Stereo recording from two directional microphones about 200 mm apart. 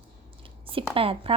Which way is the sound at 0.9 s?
25° right (ahead or behind).